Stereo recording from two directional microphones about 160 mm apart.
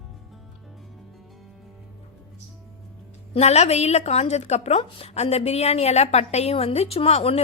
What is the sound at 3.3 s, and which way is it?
A woman's voice, 45° left (ahead or behind).